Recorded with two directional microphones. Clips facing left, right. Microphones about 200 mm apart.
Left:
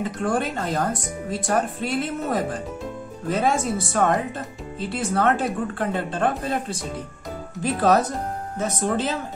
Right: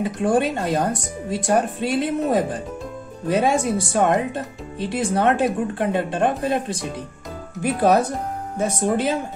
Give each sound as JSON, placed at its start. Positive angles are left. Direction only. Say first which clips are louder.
{"t": 0.0, "sound": "speech", "louder": "right 4 dB", "side_deg": -15}